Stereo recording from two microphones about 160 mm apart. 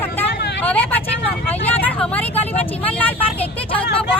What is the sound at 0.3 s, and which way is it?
Vehicle, 90° left.